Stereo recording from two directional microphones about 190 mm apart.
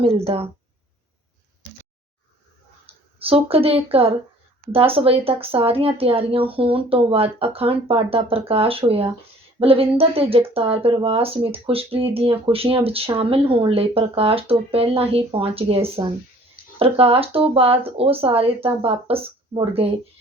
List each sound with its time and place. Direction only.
0.3 s speech: 30° right (ahead or behind)
2.8 s speech: 30° right (ahead or behind)